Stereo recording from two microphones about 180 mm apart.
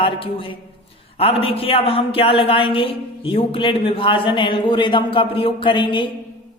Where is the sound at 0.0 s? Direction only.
30° left (ahead or behind).